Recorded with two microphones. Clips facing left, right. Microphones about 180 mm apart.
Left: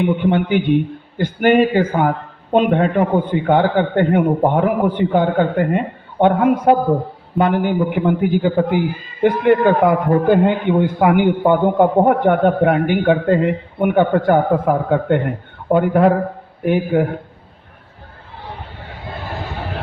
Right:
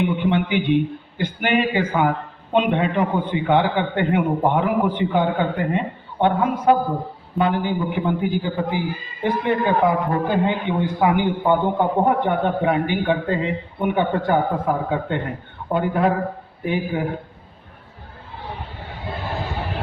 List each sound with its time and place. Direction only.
0.3 s a man's voice: 45° left (ahead or behind)